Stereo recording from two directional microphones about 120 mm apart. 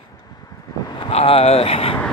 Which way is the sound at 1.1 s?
55° left (ahead or behind).